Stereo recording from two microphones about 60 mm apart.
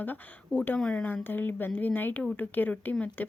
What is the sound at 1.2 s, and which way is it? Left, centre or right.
A woman's voice, left.